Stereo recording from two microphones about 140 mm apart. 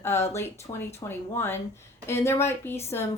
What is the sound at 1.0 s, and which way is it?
A woman's voice, 15° left (ahead or behind).